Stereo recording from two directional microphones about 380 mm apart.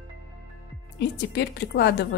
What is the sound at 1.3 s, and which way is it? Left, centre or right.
Speech, left.